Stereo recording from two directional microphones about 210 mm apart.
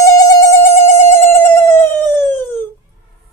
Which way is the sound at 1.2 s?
10° left (ahead or behind).